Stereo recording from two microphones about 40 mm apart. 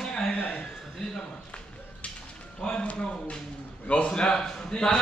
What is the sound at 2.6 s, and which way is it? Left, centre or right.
Speech, left.